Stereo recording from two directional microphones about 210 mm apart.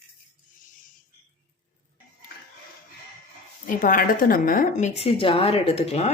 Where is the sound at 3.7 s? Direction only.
40° left (ahead or behind).